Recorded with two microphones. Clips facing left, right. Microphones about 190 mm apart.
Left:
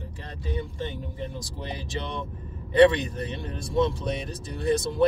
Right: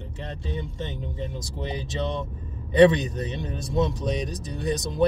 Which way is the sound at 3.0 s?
20° right (ahead or behind).